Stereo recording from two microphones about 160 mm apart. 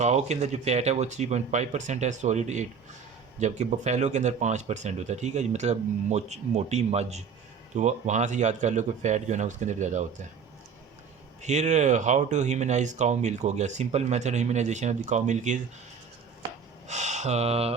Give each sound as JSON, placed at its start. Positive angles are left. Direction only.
{"t": 0.0, "sound": "speech", "side_deg": -45}
{"t": 11.4, "sound": "speech", "side_deg": -45}
{"t": 16.8, "sound": "speech", "side_deg": -45}